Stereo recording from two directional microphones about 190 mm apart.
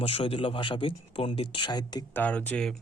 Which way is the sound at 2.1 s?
10° left (ahead or behind).